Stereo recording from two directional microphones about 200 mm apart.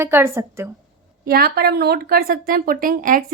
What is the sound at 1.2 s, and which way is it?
Speech, 45° right (ahead or behind).